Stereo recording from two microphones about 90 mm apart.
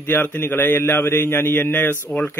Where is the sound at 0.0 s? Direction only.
20° left (ahead or behind).